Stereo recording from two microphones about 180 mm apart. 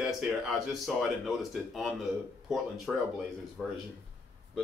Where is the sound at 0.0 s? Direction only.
Centre (ahead or behind).